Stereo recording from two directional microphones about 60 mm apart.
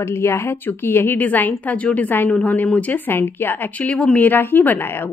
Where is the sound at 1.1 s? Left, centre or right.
Left.